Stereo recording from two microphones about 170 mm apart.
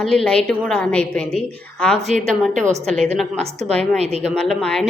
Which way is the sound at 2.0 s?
40° right (ahead or behind).